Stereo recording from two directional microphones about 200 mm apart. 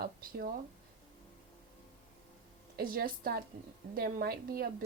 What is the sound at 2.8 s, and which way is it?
A woman's voice, 50° right (ahead or behind).